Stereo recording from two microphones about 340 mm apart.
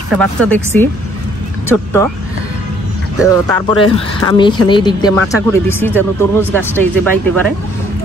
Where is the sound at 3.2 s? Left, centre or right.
Centre.